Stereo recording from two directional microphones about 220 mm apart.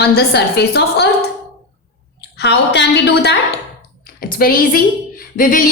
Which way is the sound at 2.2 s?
50° left (ahead or behind).